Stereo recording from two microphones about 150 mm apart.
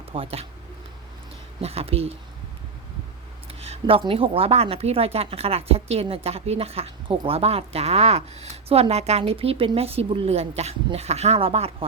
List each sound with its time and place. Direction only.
0.1 s a woman's voice: 40° right (ahead or behind)
1.6 s a woman's voice: 40° right (ahead or behind)
3.6 s a woman's voice: 40° right (ahead or behind)